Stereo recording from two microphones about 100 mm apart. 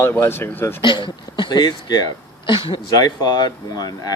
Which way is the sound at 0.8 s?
55° left (ahead or behind).